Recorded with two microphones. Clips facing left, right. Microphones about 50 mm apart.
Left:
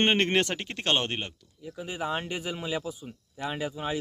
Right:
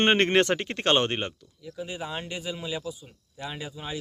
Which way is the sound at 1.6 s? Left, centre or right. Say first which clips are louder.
Left 2 dB; centre.